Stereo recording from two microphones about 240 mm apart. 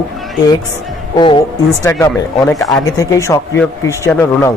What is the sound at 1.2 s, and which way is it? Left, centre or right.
Speech, centre.